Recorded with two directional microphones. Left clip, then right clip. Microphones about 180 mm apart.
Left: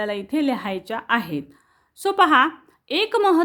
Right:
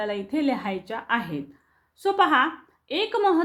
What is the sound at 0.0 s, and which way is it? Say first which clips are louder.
A woman's voice: left 3 dB; 40° left (ahead or behind).